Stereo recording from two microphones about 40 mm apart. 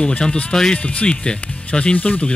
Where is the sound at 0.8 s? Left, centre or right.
Left.